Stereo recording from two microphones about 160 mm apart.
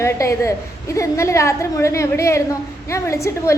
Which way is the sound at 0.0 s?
20° left (ahead or behind).